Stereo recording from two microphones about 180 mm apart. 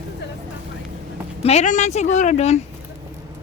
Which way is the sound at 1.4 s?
40° left (ahead or behind).